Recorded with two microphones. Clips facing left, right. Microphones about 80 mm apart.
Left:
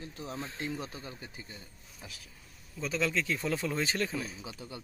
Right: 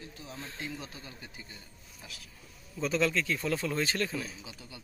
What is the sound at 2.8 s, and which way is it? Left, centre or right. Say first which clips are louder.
Speech: right 3 dB; centre.